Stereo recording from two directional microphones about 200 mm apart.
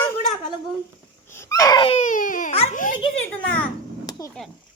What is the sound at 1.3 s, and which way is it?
Baby cry, 15° left (ahead or behind).